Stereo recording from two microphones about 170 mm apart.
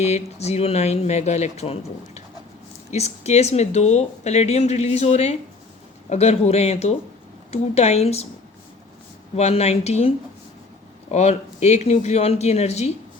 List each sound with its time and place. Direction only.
0.0 s a woman's voice: 40° left (ahead or behind)
9.3 s a woman's voice: 40° left (ahead or behind)
11.1 s a woman's voice: 40° left (ahead or behind)